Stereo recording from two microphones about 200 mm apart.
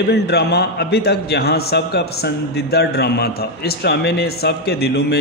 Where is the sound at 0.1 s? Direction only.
55° left (ahead or behind).